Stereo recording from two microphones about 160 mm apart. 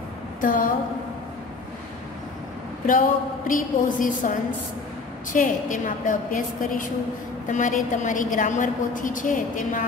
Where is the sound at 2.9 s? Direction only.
55° left (ahead or behind).